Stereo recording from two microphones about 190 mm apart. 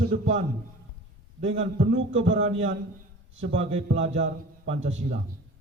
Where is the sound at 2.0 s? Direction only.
90° right.